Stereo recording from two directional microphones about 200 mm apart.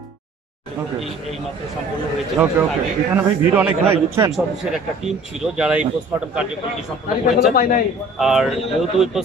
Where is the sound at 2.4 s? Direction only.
5° right (ahead or behind).